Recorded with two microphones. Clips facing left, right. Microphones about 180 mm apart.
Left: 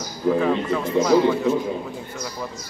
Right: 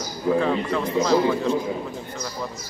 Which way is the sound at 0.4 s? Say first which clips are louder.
Left 1 dB; 5° left (ahead or behind).